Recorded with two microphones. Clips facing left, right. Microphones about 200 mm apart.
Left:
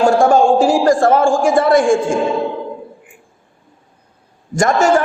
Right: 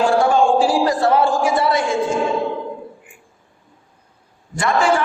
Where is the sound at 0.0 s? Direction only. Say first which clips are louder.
Left 4 dB; 45° left (ahead or behind).